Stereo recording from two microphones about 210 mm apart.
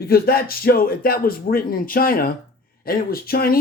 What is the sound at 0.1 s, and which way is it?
Speech, 45° left (ahead or behind).